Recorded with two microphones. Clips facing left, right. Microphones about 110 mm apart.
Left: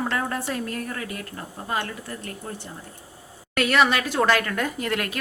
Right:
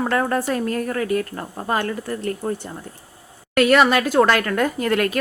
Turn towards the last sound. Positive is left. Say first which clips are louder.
# right 7 dB
turn(degrees=-50)  # may be behind; listen again after turning